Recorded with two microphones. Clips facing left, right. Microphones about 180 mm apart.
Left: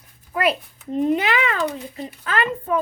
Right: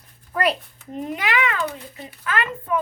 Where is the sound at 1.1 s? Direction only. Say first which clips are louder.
Left 2 dB; 30° left (ahead or behind).